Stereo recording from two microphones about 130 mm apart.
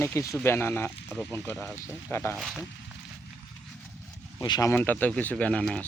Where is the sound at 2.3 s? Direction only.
Centre (ahead or behind).